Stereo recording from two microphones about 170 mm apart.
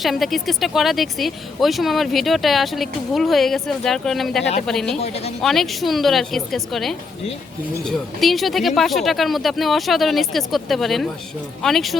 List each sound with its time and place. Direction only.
0.0 s speech: centre (ahead or behind)
4.9 s speech: 40° left (ahead or behind)
5.4 s speech: centre (ahead or behind)